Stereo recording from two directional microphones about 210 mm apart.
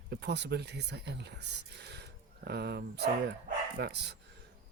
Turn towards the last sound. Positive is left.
turn(degrees=-50)  # may be behind; listen again after turning